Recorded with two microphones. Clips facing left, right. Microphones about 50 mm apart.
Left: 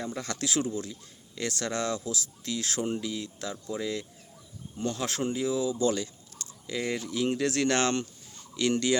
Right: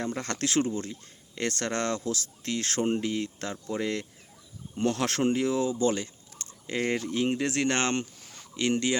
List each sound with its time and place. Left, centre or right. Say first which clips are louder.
0.0 s speech: right 3 dB; right
5.8 s a sound: right 1 dB; right
7.3 s speech: left 3 dB; right